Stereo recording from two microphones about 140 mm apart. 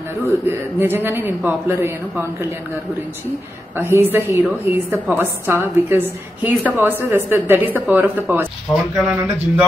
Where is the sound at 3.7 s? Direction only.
15° right (ahead or behind).